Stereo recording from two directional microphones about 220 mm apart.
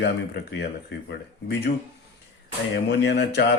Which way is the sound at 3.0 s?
50° left (ahead or behind).